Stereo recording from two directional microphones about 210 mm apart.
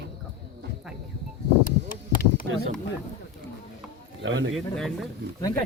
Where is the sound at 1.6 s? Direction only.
40° left (ahead or behind).